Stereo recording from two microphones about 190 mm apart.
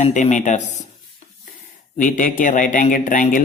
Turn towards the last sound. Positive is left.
turn(degrees=45)  # may be behind; listen again after turning